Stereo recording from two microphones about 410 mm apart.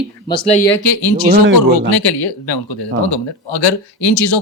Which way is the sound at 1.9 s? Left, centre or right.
Left.